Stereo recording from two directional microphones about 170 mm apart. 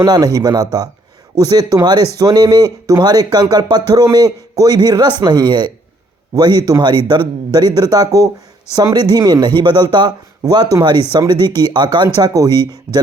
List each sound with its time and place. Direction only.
0.0 s speech: 20° right (ahead or behind)